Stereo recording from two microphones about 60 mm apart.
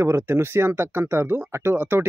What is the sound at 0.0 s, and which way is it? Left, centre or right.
Speech, right.